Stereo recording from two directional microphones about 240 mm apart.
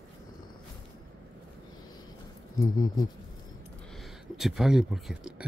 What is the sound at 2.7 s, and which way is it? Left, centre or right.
Speech, centre.